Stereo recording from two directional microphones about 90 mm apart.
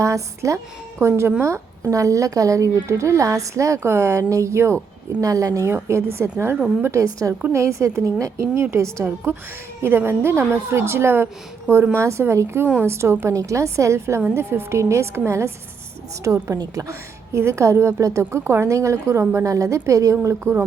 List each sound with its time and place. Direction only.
0.0 s a woman's voice: 35° right (ahead or behind)